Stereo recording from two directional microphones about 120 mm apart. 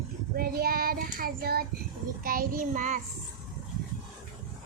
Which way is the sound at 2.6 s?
90° right.